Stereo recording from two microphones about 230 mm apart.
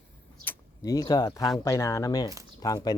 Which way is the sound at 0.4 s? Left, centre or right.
Centre.